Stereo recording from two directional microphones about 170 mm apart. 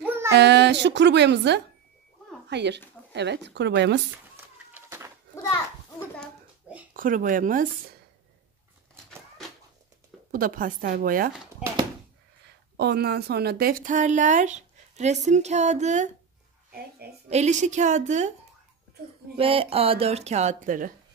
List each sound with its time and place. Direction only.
0.0 s child singing: 15° right (ahead or behind)
0.3 s speech: 85° right
4.7 s dog: 15° right (ahead or behind)
5.3 s children playing: 15° left (ahead or behind)
6.9 s speech: 50° right (ahead or behind)
10.3 s speech: 55° right (ahead or behind)
12.7 s speech: 75° right (ahead or behind); by 16.1 s 45° right (ahead or behind)
17.3 s speech: 40° right (ahead or behind)
19.3 s speech: 35° right (ahead or behind); by 20.9 s 50° right (ahead or behind)